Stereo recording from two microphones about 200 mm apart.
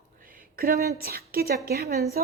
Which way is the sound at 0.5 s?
50° right (ahead or behind).